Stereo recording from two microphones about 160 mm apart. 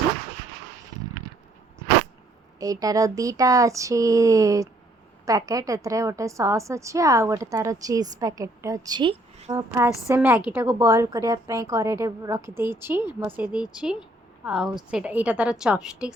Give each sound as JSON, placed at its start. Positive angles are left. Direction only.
{"t": 2.6, "sound": "a woman's voice", "side_deg": -20}
{"t": 10.2, "sound": "a woman's voice", "side_deg": -10}